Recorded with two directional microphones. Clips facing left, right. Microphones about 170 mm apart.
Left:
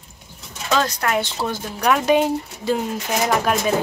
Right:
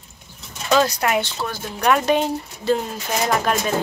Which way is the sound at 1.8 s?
5° left (ahead or behind).